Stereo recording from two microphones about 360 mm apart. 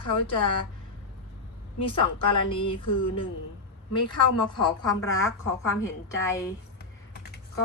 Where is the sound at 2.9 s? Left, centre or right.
Left.